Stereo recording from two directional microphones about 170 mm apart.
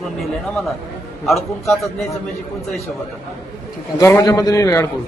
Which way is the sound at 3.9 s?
20° left (ahead or behind).